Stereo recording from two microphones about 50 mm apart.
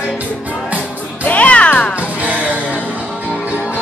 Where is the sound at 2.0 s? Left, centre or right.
Right.